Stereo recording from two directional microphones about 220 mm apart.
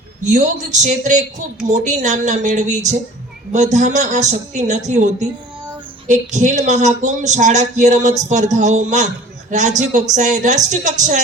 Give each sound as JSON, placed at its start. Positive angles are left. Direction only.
{"t": 0.3, "sound": "speech", "side_deg": -35}